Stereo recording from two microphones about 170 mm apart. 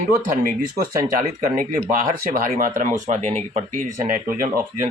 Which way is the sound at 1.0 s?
55° right (ahead or behind).